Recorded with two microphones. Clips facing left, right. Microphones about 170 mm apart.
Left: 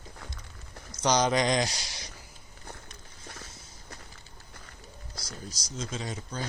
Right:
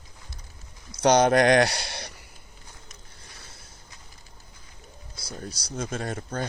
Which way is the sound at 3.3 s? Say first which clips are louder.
Left 2 dB; 60° right (ahead or behind).